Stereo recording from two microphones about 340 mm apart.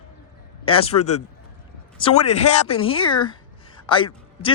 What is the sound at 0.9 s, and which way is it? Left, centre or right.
Speech, left.